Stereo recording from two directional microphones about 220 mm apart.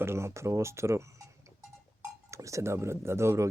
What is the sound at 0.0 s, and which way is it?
Speech, 10° right (ahead or behind).